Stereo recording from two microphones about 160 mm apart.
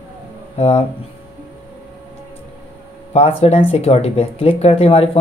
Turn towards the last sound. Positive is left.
turn(degrees=40)  # may be behind; listen again after turning